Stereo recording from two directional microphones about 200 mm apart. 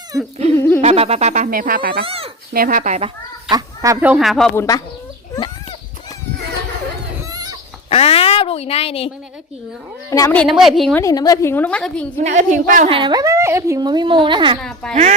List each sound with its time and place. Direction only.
0.8 s speech: 30° right (ahead or behind); by 2.0 s 50° right (ahead or behind)
2.0 s a woman's voice: 30° right (ahead or behind)
2.5 s speech: 45° right (ahead or behind)
3.5 s speech: 15° right (ahead or behind); by 4.5 s centre (ahead or behind)
4.5 s a woman's voice: 15° left (ahead or behind)
7.9 s speech: 30° left (ahead or behind)
10.1 s a woman's voice: 15° left (ahead or behind)
10.4 s a woman's voice: centre (ahead or behind)
11.0 s a woman's voice: 20° left (ahead or behind)
12.1 s speech: 40° right (ahead or behind)
12.9 s a woman's voice: 25° right (ahead or behind)
14.6 s a woman's voice: 5° left (ahead or behind)